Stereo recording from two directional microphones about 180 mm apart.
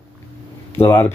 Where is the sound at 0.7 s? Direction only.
10° left (ahead or behind).